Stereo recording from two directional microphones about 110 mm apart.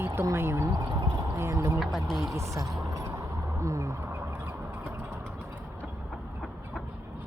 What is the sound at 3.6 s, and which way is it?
Speech, 25° right (ahead or behind).